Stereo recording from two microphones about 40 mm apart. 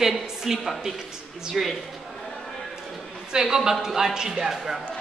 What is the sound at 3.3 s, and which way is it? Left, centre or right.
A woman's voice, centre.